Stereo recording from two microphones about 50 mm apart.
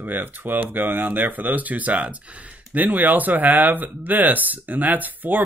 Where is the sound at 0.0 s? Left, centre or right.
Right.